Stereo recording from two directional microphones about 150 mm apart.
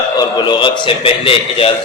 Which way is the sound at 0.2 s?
30° left (ahead or behind).